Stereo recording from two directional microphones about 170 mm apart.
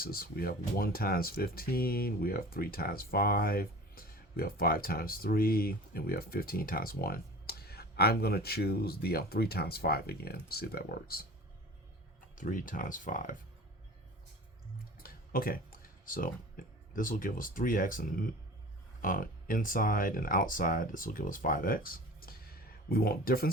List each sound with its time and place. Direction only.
0.0 s speech: 60° left (ahead or behind)
12.4 s speech: 50° left (ahead or behind)
14.9 s computer keyboard: 60° left (ahead or behind)
16.9 s speech: 55° left (ahead or behind)